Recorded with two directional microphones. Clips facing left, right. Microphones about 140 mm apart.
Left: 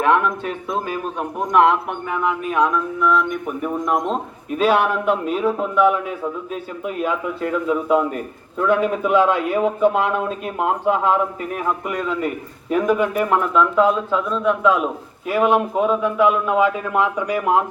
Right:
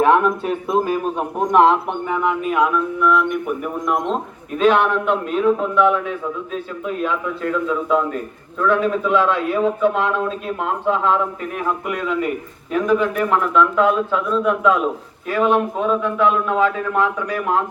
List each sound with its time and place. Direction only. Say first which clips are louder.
0.0 s speech: right 3 dB; 35° right (ahead or behind)
1.5 s speech: right 1 dB; 30° right (ahead or behind)
2.5 s a sound: even; 10° right (ahead or behind)
4.6 s a man's voice: right 1 dB; 5° left (ahead or behind)
11.9 s a man's voice: right 1 dB; centre (ahead or behind)
12.7 s a man's voice: even; 10° left (ahead or behind)
15.3 s a man's voice: even; 15° left (ahead or behind)